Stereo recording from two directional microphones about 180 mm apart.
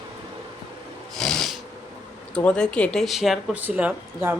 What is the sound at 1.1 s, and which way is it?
Snort, centre (ahead or behind).